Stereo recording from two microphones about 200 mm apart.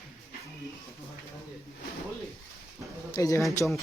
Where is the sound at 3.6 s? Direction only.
Centre (ahead or behind).